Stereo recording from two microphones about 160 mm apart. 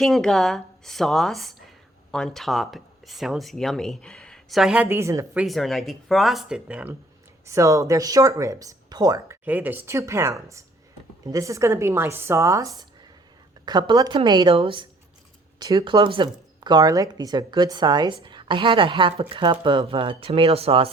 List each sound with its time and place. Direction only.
0.0 s speech: centre (ahead or behind); by 5.4 s 15° right (ahead or behind)
5.4 s speech: centre (ahead or behind)
7.4 s speech: 20° right (ahead or behind)
9.4 s speech: 10° right (ahead or behind); by 20.9 s 35° right (ahead or behind)